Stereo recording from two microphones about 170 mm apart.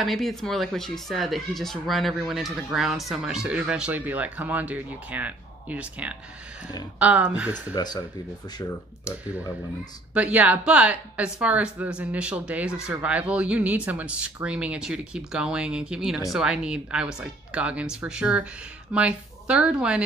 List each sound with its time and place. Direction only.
0.0 s speech: centre (ahead or behind)
7.7 s speech: 25° left (ahead or behind)
10.1 s speech: 10° right (ahead or behind)